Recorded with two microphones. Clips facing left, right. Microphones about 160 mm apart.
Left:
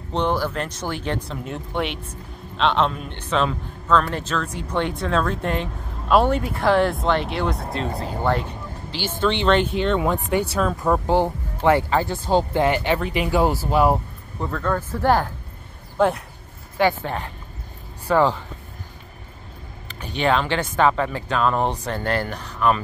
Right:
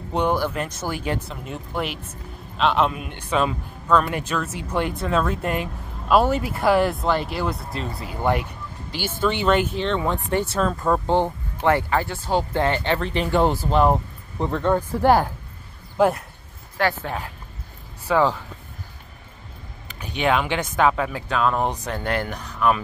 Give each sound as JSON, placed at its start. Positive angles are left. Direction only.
{"t": 0.1, "sound": "a man's voice", "side_deg": -10}
{"t": 7.9, "sound": "speech", "side_deg": 40}
{"t": 8.2, "sound": "speech", "side_deg": -15}
{"t": 9.8, "sound": "speech", "side_deg": 5}
{"t": 14.4, "sound": "a man's voice", "side_deg": -25}
{"t": 20.0, "sound": "speech", "side_deg": -10}